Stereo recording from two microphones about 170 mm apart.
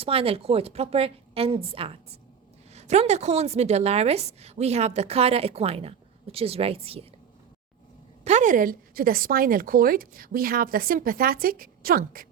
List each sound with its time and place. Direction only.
0.0 s a woman's voice: 35° right (ahead or behind)
8.2 s a woman's voice: 45° right (ahead or behind); by 12.3 s 60° right (ahead or behind)